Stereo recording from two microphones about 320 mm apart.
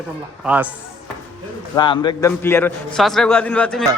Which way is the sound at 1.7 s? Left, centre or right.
Centre.